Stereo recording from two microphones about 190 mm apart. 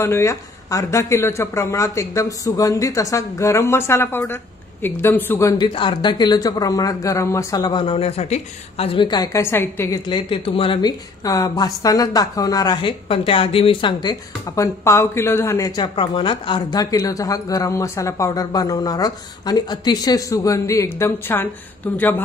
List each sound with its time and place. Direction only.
0.0 s a woman's voice: 15° left (ahead or behind)
10.0 s a woman's voice: 25° left (ahead or behind); by 22.2 s 10° left (ahead or behind)